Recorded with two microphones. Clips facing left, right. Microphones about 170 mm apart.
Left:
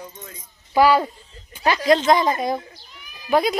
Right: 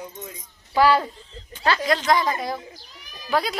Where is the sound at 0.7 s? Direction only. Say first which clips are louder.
Left 2 dB; 15° left (ahead or behind).